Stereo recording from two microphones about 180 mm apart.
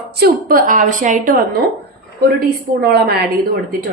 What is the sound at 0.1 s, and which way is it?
A woman's voice, 55° right (ahead or behind).